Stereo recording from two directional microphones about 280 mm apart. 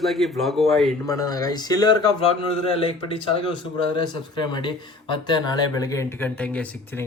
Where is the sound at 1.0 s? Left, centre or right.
Centre.